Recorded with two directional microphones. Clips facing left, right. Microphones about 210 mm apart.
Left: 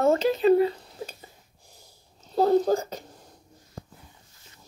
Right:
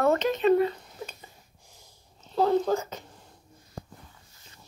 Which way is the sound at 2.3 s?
40° left (ahead or behind).